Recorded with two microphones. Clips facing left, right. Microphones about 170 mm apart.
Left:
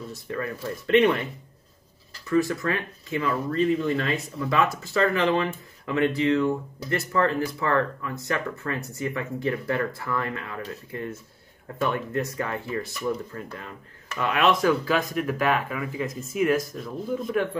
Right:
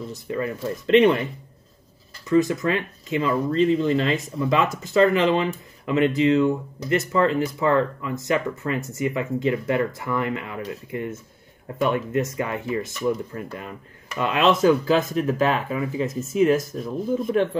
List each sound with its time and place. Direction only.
0.3 s speech: 20° right (ahead or behind)
2.2 s speech: 20° right (ahead or behind)